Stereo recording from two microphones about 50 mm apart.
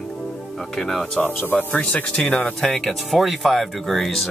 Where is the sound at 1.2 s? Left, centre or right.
Left.